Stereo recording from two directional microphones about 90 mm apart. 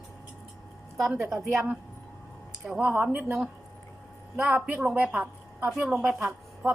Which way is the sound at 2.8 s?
20° right (ahead or behind).